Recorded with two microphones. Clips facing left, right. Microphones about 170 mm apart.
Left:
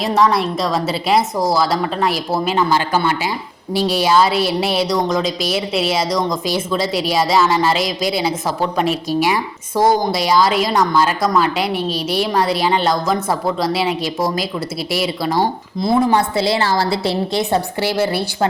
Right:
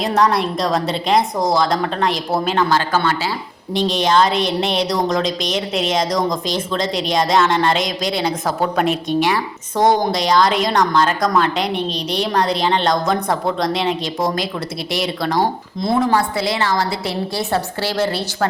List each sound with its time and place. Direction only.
0.0 s a woman's voice: centre (ahead or behind)
16.0 s a woman's voice: 25° left (ahead or behind)
17.5 s a woman's voice: 15° left (ahead or behind)